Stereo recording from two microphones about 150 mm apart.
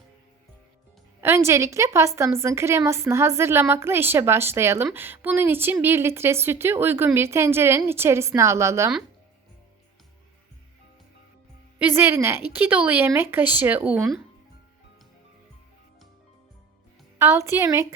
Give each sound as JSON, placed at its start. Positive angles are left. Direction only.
{"t": 1.2, "sound": "a woman's voice", "side_deg": -15}
{"t": 11.8, "sound": "a woman's voice", "side_deg": -15}
{"t": 17.2, "sound": "a woman's voice", "side_deg": -15}